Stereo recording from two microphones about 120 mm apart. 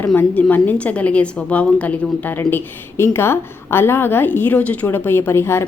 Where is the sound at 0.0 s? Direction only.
15° left (ahead or behind).